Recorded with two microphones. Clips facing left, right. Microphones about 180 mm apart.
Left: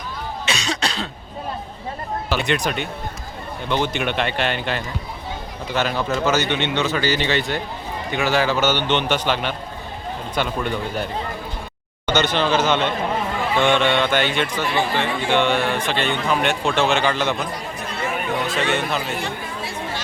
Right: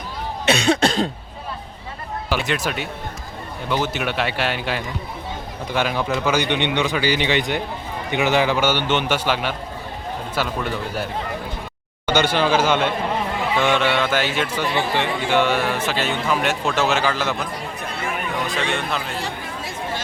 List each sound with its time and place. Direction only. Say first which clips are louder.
0.4 s cough: right 9 dB; 55° right (ahead or behind)
2.3 s a man's voice: left 1 dB; 5° right (ahead or behind)
18.4 s a man's voice: left 2 dB; centre (ahead or behind)